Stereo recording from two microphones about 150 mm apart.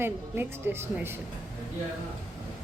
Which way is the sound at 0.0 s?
15° right (ahead or behind).